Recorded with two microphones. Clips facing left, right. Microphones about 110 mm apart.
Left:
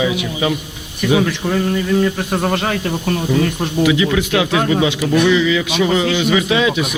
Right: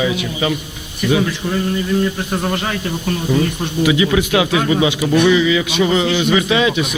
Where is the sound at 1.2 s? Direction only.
80° left.